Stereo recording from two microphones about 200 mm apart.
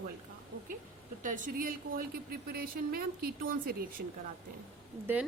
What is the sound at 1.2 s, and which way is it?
A woman's voice, 45° right (ahead or behind).